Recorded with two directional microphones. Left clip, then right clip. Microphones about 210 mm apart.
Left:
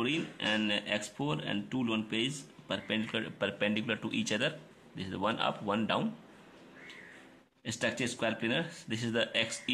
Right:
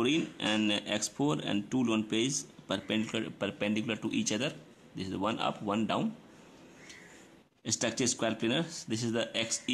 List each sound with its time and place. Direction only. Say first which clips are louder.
0.0 s speech: right 3 dB; 20° right (ahead or behind)
8.0 s speech: right 2 dB; 20° right (ahead or behind)